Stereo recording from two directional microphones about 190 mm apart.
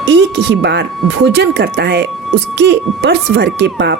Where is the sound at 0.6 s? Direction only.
65° right (ahead or behind).